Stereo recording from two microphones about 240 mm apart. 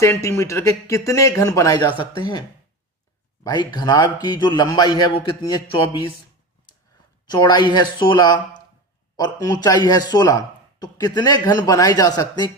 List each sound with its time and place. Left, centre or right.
0.0 s speech: centre
3.4 s speech: centre
7.3 s speech: centre